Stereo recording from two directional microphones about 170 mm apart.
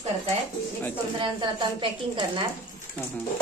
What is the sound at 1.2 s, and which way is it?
Speech, 30° right (ahead or behind).